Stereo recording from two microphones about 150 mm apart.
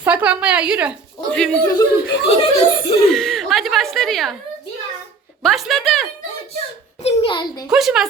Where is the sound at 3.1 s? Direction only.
Centre (ahead or behind).